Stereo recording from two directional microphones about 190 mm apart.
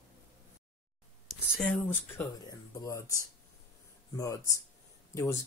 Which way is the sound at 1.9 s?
15° left (ahead or behind).